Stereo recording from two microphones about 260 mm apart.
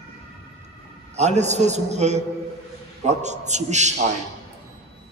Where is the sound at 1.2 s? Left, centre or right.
Right.